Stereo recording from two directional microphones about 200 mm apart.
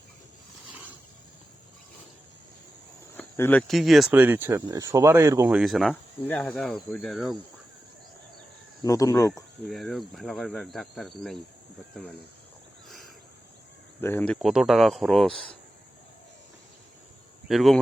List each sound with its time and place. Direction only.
3.2 s cricket: 10° left (ahead or behind)
3.7 s speech: centre (ahead or behind); by 5.5 s 15° right (ahead or behind)
5.5 s speech: 5° right (ahead or behind)
8.8 s speech: 15° left (ahead or behind)
9.3 s speech: centre (ahead or behind)
14.0 s speech: 10° left (ahead or behind)
17.5 s speech: centre (ahead or behind)